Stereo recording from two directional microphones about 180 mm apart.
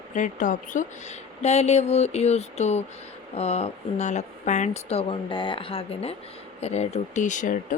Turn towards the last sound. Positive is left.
turn(degrees=45)  # may be behind; listen again after turning